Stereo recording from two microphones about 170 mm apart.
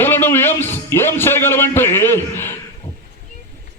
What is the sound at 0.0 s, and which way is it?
A man's voice, 15° left (ahead or behind).